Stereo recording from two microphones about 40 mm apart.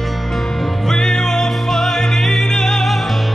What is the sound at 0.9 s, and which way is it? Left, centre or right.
Music, centre.